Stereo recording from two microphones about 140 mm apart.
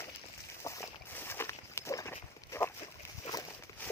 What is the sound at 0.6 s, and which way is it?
Walk, 20° left (ahead or behind).